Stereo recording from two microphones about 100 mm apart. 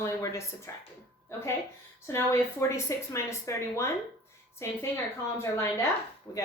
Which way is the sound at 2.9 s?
30° left (ahead or behind).